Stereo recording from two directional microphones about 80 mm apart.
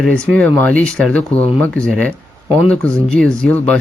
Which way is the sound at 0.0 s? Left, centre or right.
Centre.